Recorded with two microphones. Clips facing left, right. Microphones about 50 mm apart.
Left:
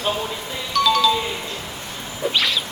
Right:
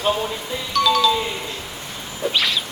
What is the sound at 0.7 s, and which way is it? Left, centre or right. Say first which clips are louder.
Music: even; centre.